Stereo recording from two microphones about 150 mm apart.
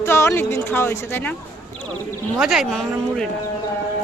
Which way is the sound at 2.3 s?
5° right (ahead or behind).